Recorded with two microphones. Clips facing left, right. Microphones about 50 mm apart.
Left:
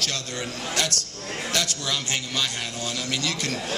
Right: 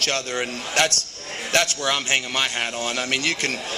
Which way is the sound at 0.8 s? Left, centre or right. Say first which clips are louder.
Right 8 dB; right.